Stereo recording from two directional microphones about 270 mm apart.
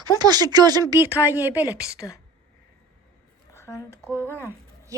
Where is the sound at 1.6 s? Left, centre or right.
Centre.